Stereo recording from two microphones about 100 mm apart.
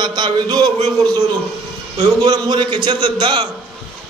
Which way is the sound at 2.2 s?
45° right (ahead or behind).